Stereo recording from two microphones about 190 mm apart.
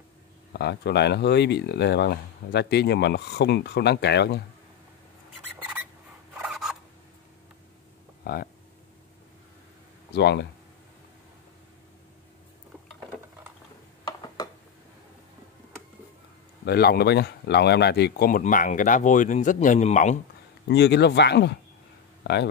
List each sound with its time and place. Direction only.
0.5 s speech: 65° left (ahead or behind)
6.3 s scissors: centre (ahead or behind)
8.2 s speech: 55° left (ahead or behind)
10.1 s speech: 60° left (ahead or behind)
14.0 s a sound: 20° left (ahead or behind)
16.6 s speech: 55° left (ahead or behind); by 20.2 s 40° left (ahead or behind)
20.6 s speech: 60° left (ahead or behind)